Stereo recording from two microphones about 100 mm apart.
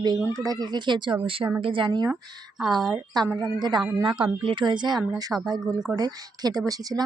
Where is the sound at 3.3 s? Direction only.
45° right (ahead or behind).